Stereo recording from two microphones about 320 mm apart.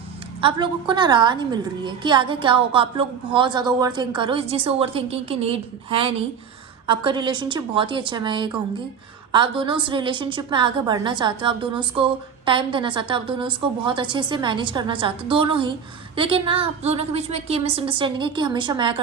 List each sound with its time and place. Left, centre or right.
0.4 s a woman's voice: centre